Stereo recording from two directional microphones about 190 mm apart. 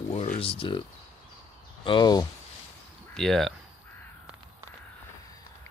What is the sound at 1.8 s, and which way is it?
Speech, 25° left (ahead or behind).